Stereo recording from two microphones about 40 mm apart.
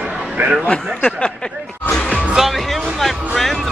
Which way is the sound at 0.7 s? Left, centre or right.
Left.